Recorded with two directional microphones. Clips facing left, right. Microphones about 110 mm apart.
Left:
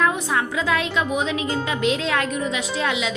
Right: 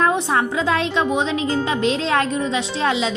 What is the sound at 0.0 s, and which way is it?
A woman's voice, 30° right (ahead or behind).